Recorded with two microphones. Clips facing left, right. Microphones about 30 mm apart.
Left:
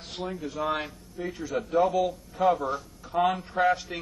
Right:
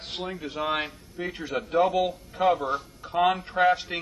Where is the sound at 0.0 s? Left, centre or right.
Right.